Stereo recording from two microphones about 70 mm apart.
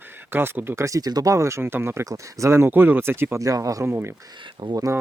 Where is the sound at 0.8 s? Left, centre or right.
Right.